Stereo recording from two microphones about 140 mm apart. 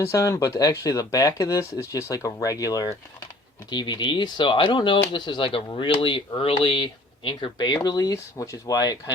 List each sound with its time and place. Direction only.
0.0 s speech: 20° left (ahead or behind)